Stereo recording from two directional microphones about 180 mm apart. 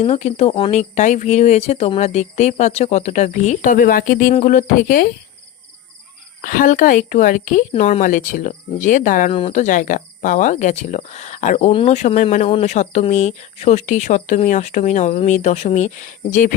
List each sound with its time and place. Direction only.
0.0 s speech: 35° left (ahead or behind)
6.4 s speech: 50° left (ahead or behind)
9.3 s speech: 35° left (ahead or behind)
11.7 s speech: 30° left (ahead or behind)
12.0 s speech: 40° left (ahead or behind)